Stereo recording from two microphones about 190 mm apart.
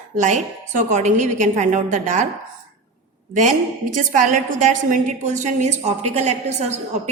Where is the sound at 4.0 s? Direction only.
45° right (ahead or behind).